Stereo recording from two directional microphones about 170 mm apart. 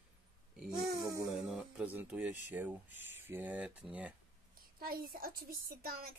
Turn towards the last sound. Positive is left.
turn(degrees=-60)  # may be behind; listen again after turning